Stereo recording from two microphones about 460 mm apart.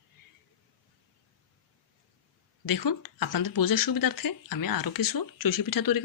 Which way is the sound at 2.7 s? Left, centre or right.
Left.